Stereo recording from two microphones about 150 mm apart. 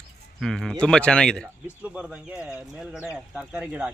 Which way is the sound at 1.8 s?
10° right (ahead or behind).